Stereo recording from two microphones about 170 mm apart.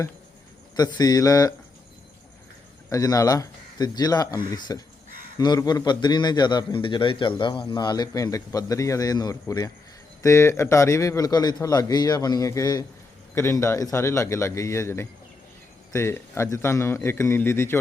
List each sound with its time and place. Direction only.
0.8 s a man's voice: 20° left (ahead or behind)
2.9 s a man's voice: 20° left (ahead or behind)